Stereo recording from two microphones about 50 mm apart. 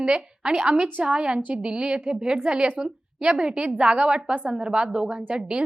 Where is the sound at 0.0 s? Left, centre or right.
Centre.